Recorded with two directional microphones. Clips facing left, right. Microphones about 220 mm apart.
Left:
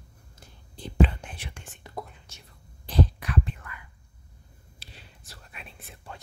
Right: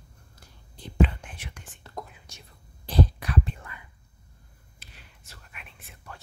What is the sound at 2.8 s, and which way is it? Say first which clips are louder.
Whispering: right 1 dB; 35° right (ahead or behind).